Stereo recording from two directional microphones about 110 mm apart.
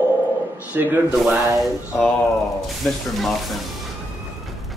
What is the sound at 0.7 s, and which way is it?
Speech, 15° right (ahead or behind).